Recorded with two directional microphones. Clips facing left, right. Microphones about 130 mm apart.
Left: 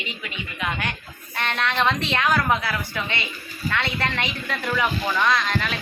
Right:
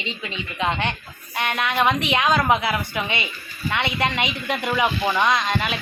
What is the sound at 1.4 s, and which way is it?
A woman's voice, 10° right (ahead or behind).